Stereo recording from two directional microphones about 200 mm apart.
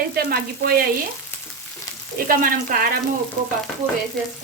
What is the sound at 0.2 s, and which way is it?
Speech, 45° right (ahead or behind).